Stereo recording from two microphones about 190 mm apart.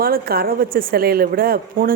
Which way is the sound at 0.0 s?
50° right (ahead or behind).